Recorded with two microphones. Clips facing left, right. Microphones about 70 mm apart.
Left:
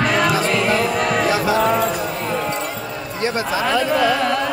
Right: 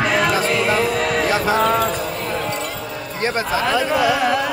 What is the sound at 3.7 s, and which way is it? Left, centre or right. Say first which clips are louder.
Carnatic music: left 1 dB; centre.